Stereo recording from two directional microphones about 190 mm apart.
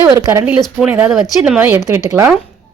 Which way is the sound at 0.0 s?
20° right (ahead or behind).